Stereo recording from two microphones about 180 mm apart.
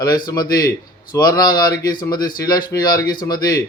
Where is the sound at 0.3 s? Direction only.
20° left (ahead or behind).